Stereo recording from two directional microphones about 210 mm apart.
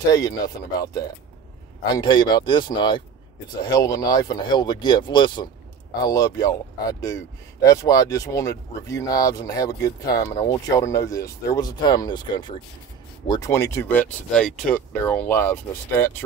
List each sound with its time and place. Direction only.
0.1 s speech: 15° left (ahead or behind)